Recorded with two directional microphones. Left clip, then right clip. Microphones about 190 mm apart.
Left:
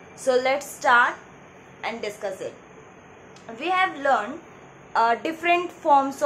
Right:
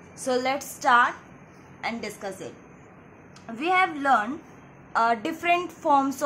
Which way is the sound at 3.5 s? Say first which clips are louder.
Even; 30° right (ahead or behind).